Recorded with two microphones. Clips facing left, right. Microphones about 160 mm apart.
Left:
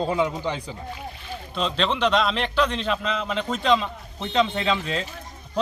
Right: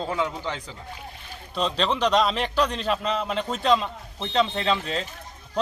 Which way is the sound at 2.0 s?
40° right (ahead or behind).